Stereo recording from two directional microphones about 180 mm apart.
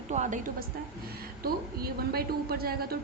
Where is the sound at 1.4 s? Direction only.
55° right (ahead or behind).